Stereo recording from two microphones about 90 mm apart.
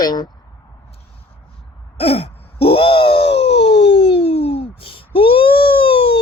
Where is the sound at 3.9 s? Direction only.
70° left (ahead or behind); by 5.1 s 85° left.